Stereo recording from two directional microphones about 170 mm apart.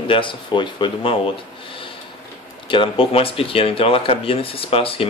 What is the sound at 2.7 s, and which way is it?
Speech, 30° left (ahead or behind).